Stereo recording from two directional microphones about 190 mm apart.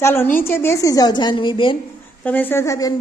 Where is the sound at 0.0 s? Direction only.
10° left (ahead or behind).